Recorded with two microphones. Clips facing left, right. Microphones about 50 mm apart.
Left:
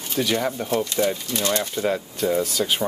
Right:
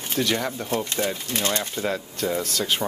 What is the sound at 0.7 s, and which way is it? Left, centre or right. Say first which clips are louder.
Speech: left 4 dB; right.